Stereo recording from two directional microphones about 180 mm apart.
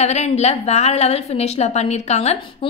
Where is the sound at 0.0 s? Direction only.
40° left (ahead or behind).